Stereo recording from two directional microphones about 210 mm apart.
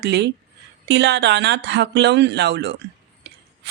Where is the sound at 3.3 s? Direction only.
55° right (ahead or behind).